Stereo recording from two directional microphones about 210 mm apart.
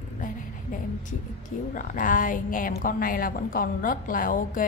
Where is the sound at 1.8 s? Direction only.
40° left (ahead or behind).